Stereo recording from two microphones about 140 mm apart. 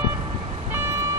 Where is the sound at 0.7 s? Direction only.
20° right (ahead or behind).